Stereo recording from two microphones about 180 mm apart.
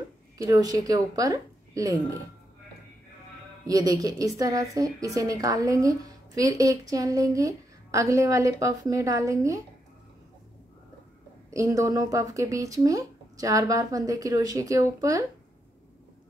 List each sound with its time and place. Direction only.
0.4 s a woman's voice: 20° right (ahead or behind)
3.6 s a woman's voice: 20° right (ahead or behind)
11.5 s a woman's voice: 15° right (ahead or behind)